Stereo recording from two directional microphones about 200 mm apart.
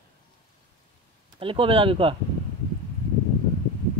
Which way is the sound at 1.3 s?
25° right (ahead or behind).